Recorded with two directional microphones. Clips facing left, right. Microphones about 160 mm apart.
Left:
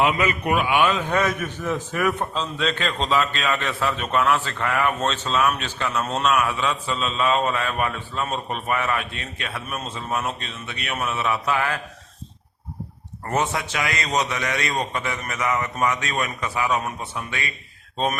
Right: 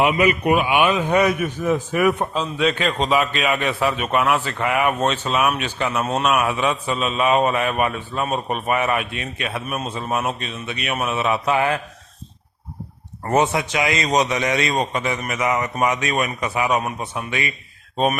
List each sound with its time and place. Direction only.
0.0 s a man's voice: 15° right (ahead or behind)
13.3 s a man's voice: 20° right (ahead or behind)